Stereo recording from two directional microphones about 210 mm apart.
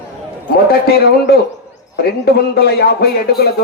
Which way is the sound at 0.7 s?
50° left (ahead or behind).